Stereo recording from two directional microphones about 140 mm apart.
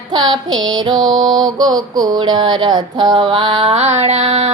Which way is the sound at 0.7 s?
30° right (ahead or behind).